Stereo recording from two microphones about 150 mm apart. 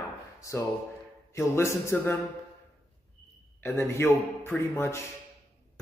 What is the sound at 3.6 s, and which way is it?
Speech, 15° left (ahead or behind).